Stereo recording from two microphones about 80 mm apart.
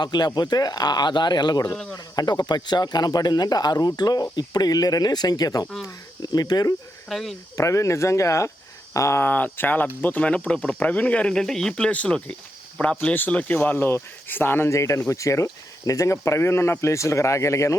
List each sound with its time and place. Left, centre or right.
0.0 s speech: left
7.1 s speech: centre
7.5 s speech: left